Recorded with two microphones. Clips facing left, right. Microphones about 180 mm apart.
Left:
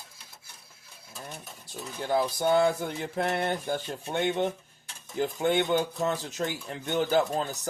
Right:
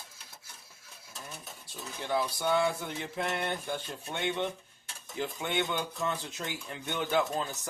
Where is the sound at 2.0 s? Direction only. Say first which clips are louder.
Left 5 dB; 40° left (ahead or behind).